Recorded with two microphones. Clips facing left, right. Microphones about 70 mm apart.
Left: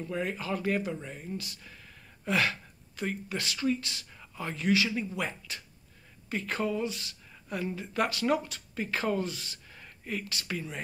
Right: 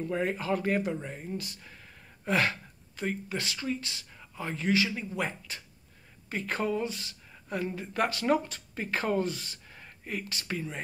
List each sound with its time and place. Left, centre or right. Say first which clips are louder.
0.0 s speech: right 3 dB; right
2.2 s gasp: right 1 dB; right
3.0 s speech: right 1 dB; centre
6.3 s speech: right 1 dB; right
9.7 s a sound: left 1 dB; centre